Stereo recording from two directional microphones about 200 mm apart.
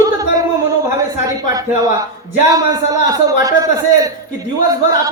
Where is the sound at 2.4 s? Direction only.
15° right (ahead or behind).